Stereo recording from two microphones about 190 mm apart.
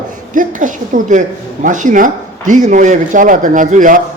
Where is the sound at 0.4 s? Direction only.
45° right (ahead or behind).